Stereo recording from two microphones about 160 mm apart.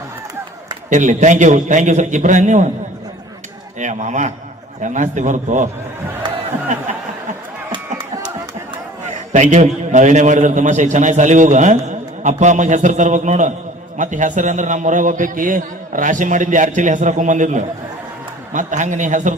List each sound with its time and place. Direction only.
0.9 s a man's voice: 50° right (ahead or behind)
3.8 s a man's voice: 50° right (ahead or behind)
9.3 s a man's voice: 45° right (ahead or behind)